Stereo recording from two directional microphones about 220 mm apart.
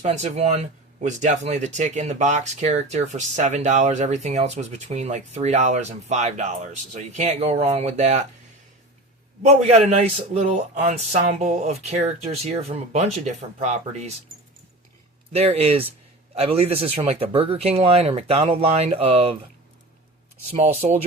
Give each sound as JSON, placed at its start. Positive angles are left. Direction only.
{"t": 0.0, "sound": "speech", "side_deg": -30}
{"t": 9.9, "sound": "speech", "side_deg": -30}
{"t": 15.3, "sound": "speech", "side_deg": -25}
{"t": 20.5, "sound": "speech", "side_deg": -30}